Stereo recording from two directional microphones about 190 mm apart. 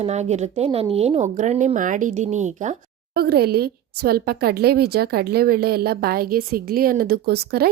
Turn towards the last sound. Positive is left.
turn(degrees=-55)  # may be behind; listen again after turning